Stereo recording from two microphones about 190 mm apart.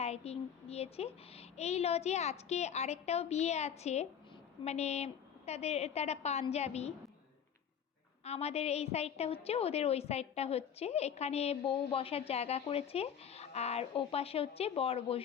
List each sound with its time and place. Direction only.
0.0 s a woman's voice: 35° left (ahead or behind)
8.2 s a woman's voice: 35° left (ahead or behind)